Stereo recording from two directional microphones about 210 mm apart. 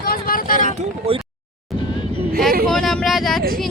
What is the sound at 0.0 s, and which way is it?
Vehicle, 45° left (ahead or behind).